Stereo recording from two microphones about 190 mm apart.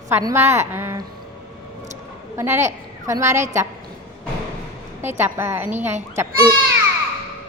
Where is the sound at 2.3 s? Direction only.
15° right (ahead or behind).